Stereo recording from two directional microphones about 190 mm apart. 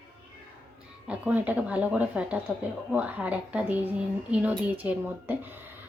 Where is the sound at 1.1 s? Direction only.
10° right (ahead or behind).